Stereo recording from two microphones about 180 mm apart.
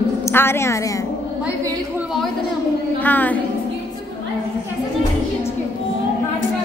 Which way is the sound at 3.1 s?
10° left (ahead or behind).